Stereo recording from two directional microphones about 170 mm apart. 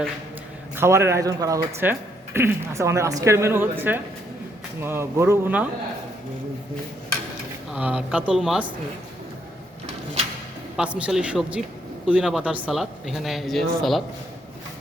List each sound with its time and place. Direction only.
0.8 s speech: 15° right (ahead or behind)
7.7 s speech: 5° right (ahead or behind)
10.8 s speech: 5° right (ahead or behind)